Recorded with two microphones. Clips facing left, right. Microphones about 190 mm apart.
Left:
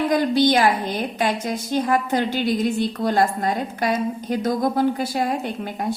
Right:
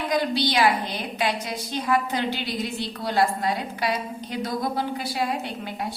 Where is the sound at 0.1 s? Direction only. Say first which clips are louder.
Left 4 dB; 50° left (ahead or behind).